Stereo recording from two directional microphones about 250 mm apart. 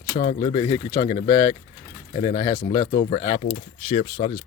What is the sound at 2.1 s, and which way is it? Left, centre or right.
Speech, centre.